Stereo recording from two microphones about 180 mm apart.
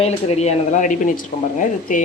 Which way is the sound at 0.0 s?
35° left (ahead or behind).